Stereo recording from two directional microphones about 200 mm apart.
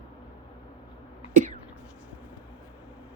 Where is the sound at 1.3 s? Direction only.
40° right (ahead or behind).